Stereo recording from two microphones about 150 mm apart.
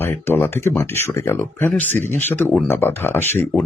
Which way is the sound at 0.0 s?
15° left (ahead or behind).